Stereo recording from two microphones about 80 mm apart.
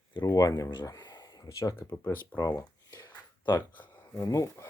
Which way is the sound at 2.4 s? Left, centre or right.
Left.